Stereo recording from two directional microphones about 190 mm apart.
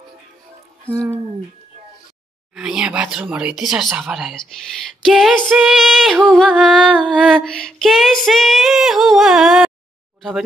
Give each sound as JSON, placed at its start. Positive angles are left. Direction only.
{"t": 2.5, "sound": "music", "side_deg": -5}